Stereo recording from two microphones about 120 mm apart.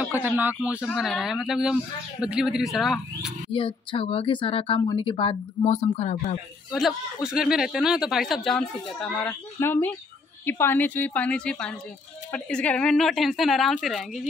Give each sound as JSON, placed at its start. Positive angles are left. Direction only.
{"t": 0.0, "sound": "speech", "side_deg": -15}
{"t": 3.5, "sound": "a woman's voice", "side_deg": 50}
{"t": 6.7, "sound": "speech", "side_deg": -5}
{"t": 8.5, "sound": "speech", "side_deg": 15}